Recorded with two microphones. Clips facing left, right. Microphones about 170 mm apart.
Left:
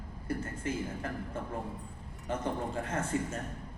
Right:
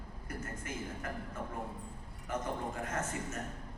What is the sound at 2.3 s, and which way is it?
A man's voice, 30° left (ahead or behind).